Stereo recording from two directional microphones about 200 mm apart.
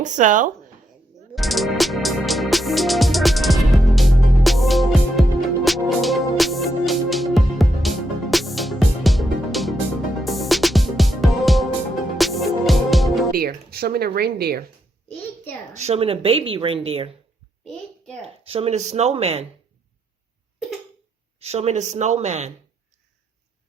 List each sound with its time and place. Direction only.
0.0 s speech: 40° right (ahead or behind)
1.4 s music: centre (ahead or behind)
13.3 s speech: 50° right (ahead or behind)
15.7 s speech: 35° right (ahead or behind)
18.2 s speech: 30° right (ahead or behind)
21.3 s speech: 30° right (ahead or behind)